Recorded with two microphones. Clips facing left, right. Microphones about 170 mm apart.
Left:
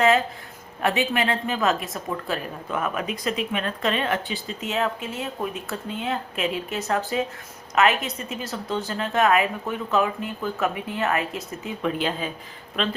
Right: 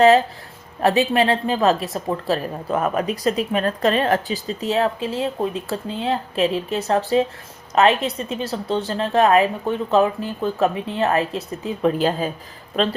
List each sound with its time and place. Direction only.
0.8 s a woman's voice: 35° right (ahead or behind)